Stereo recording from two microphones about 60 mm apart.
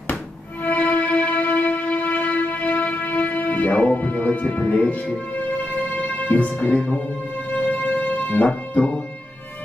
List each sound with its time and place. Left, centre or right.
0.7 s music: left
5.9 s music: left
7.8 s music: left